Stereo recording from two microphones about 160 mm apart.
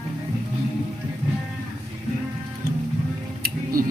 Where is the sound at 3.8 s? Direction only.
65° right (ahead or behind).